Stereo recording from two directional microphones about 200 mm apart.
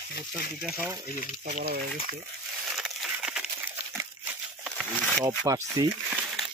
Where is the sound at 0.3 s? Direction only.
Centre (ahead or behind).